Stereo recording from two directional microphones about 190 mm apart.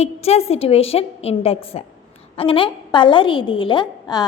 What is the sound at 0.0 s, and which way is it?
A woman's voice, 35° left (ahead or behind).